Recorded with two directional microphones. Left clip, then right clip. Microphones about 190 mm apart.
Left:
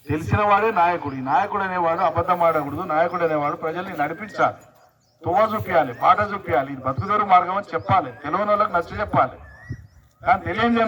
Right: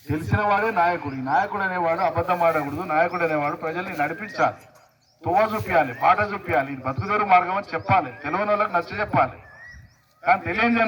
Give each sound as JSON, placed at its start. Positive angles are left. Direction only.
{"t": 0.3, "sound": "a man's voice", "side_deg": -35}